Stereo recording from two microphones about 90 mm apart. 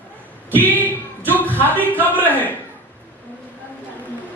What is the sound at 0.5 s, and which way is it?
Speech, 20° left (ahead or behind).